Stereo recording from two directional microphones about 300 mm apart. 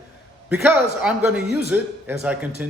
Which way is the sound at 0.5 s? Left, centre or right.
Centre.